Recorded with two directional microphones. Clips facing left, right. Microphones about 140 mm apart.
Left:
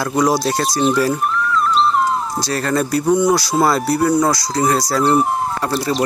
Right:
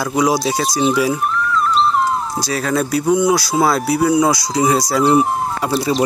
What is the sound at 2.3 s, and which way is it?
Speech, 5° right (ahead or behind).